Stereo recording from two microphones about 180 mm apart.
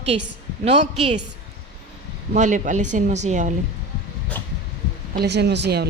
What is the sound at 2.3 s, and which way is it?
Speech, 45° right (ahead or behind).